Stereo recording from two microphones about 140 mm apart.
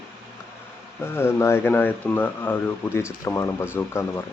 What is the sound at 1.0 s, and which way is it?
Speech, 15° left (ahead or behind).